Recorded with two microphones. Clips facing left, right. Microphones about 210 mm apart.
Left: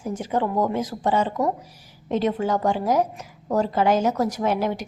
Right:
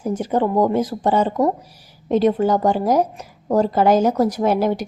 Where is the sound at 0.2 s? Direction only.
35° right (ahead or behind).